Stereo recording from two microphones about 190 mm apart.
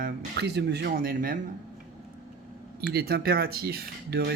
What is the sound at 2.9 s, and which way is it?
Speech, 55° right (ahead or behind).